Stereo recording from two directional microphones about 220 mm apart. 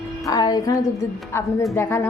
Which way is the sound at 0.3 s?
15° left (ahead or behind).